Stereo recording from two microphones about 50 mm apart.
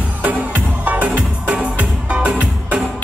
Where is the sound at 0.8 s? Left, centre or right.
Right.